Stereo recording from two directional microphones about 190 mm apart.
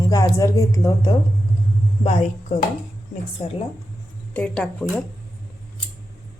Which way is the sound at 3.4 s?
30° left (ahead or behind).